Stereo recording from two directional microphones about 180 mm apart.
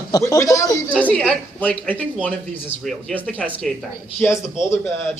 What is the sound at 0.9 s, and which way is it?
A man's voice, 5° left (ahead or behind).